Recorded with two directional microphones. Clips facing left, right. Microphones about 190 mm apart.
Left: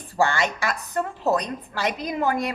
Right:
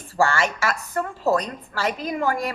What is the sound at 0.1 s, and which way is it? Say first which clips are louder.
A woman's voice: right 1 dB; 20° left (ahead or behind).